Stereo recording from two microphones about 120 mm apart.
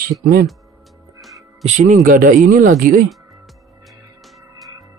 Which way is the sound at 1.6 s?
90° right.